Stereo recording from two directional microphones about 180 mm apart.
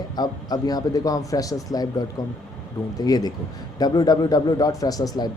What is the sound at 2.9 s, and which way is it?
Speech, 20° left (ahead or behind).